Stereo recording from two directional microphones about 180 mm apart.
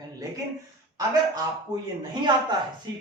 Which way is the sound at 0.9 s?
20° right (ahead or behind).